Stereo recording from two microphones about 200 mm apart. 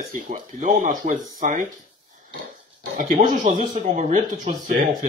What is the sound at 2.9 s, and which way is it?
Speech, 40° right (ahead or behind).